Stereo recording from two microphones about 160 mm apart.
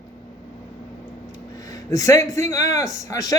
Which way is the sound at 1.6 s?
20° left (ahead or behind).